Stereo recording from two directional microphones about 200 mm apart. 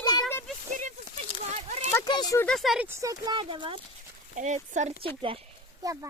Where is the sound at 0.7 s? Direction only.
40° right (ahead or behind).